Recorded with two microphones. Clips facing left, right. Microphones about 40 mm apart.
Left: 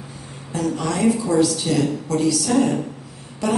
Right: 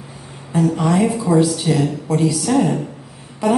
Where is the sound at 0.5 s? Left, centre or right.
Centre.